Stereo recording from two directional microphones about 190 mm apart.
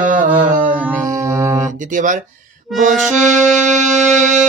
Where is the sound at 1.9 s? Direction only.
40° right (ahead or behind).